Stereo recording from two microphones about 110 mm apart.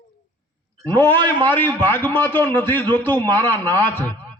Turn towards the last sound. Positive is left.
turn(degrees=20)  # may be behind; listen again after turning